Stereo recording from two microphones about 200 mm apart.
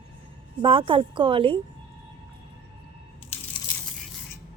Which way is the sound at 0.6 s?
25° right (ahead or behind).